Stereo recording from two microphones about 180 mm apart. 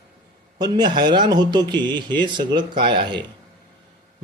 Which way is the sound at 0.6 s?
25° right (ahead or behind).